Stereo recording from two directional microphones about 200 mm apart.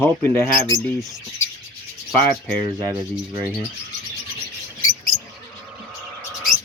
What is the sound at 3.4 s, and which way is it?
Bird, 5° left (ahead or behind).